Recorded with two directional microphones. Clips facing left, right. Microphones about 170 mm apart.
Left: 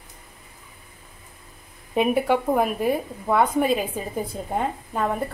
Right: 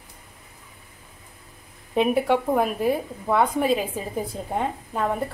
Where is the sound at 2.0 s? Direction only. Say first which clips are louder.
Even; 5° left (ahead or behind).